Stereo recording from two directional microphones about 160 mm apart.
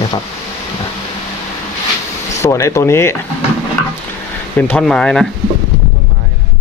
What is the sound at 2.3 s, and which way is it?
Speech, 20° left (ahead or behind).